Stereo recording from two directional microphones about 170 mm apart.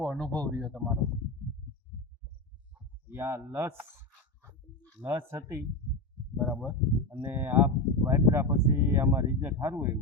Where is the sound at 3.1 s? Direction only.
15° right (ahead or behind).